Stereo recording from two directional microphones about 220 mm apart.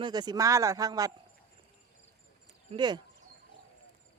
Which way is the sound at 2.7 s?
20° right (ahead or behind).